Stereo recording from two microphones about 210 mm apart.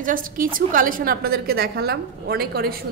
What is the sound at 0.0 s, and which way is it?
Speech, 40° right (ahead or behind).